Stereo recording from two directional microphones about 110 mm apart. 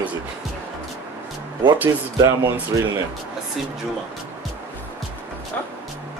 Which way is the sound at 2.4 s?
30° right (ahead or behind).